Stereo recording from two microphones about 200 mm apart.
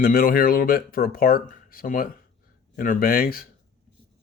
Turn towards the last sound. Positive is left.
turn(degrees=45)  # may be behind; listen again after turning